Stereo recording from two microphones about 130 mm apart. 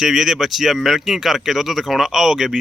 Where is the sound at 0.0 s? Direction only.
Centre (ahead or behind).